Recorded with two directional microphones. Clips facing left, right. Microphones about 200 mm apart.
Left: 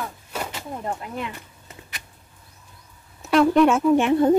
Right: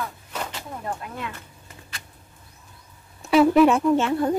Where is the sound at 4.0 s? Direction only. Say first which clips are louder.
Left 5 dB; 20° left (ahead or behind).